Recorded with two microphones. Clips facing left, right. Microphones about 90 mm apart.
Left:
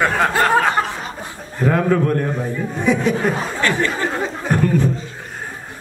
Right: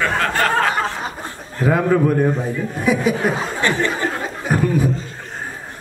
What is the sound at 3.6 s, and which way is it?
Speech, 20° right (ahead or behind).